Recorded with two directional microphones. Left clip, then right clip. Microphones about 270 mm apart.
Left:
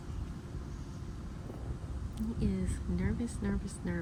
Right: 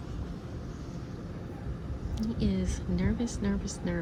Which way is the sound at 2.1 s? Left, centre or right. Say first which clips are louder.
Right 5 dB; centre.